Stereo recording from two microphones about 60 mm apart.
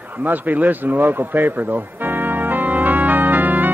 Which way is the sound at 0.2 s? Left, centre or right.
Right.